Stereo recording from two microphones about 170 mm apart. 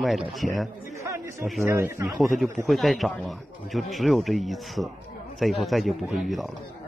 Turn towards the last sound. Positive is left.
turn(degrees=0)  # may be behind; listen again after turning